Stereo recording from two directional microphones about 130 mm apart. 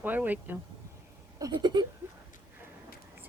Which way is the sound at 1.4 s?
30° right (ahead or behind).